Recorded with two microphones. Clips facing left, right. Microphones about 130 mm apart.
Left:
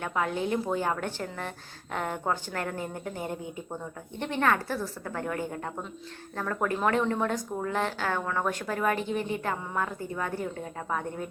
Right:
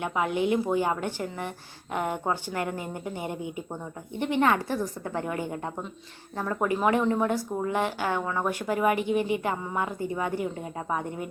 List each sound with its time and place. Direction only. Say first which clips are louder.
0.0 s a woman's voice: right 3 dB; 15° right (ahead or behind)